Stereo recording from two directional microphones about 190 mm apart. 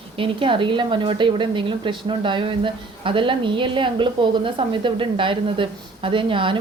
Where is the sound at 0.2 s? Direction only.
25° right (ahead or behind).